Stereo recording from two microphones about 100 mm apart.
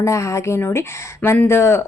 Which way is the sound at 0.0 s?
30° left (ahead or behind).